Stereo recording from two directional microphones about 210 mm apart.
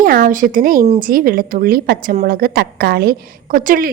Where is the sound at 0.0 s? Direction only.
40° right (ahead or behind).